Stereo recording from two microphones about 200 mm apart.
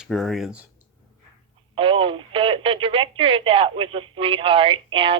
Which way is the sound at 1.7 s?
25° right (ahead or behind).